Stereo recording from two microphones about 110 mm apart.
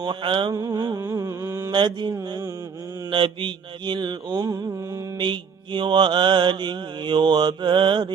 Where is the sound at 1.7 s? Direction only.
45° right (ahead or behind).